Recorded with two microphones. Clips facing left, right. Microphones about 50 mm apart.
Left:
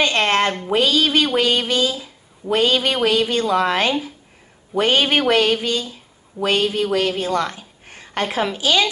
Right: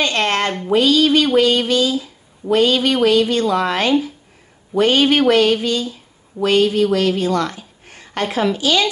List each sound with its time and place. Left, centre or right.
0.0 s a woman's voice: centre